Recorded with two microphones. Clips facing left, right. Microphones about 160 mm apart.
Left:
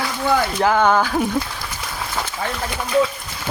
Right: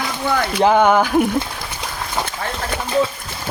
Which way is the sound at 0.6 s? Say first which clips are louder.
Right 5 dB; 20° right (ahead or behind).